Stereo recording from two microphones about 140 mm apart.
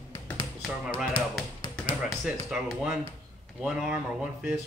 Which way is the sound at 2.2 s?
5° right (ahead or behind).